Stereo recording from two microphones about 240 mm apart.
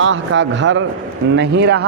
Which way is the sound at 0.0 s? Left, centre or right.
Right.